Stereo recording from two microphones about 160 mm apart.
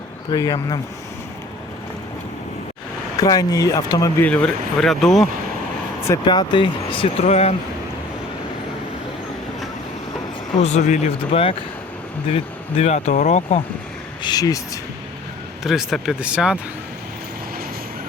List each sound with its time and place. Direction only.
0.3 s speech: 25° left (ahead or behind)
3.2 s speech: 25° left (ahead or behind)
4.8 s speech: centre (ahead or behind)
6.2 s speech: 30° left (ahead or behind)
10.6 s speech: 45° left (ahead or behind)
14.2 s speech: 25° left (ahead or behind)
15.6 s speech: centre (ahead or behind)